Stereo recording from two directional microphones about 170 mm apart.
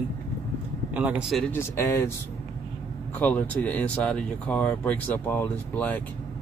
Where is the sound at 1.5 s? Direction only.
15° left (ahead or behind).